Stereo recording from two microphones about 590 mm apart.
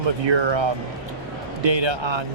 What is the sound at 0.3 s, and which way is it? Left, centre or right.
Speech, right.